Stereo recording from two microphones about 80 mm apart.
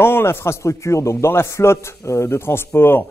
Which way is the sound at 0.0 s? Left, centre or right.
Left.